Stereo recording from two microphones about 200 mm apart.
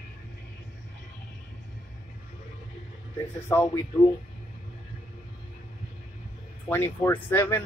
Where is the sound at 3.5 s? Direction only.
10° left (ahead or behind).